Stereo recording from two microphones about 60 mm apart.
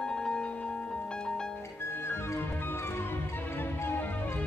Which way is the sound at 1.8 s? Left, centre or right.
Left.